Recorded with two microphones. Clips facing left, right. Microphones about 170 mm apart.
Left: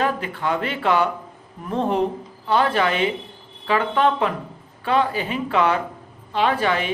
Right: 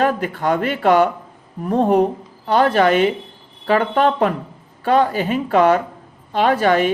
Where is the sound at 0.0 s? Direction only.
45° right (ahead or behind).